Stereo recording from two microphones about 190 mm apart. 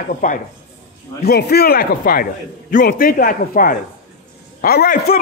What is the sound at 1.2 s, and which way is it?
A man's voice, 55° left (ahead or behind).